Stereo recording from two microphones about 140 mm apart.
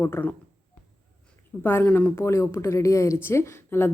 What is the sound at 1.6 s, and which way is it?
A woman's voice, 15° left (ahead or behind).